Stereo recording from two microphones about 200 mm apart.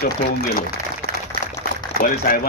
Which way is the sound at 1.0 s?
50° left (ahead or behind).